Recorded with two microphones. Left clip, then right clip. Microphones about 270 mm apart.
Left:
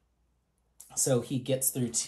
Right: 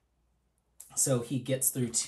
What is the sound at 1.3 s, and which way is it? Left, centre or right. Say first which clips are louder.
Speech: left 2 dB; centre.